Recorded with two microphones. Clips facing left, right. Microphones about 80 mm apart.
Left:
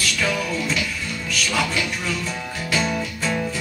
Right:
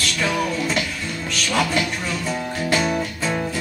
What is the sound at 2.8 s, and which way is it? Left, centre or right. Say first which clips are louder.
Music: right 2 dB; centre.